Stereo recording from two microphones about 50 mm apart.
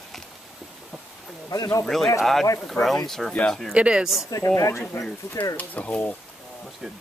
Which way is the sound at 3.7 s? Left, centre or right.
Right.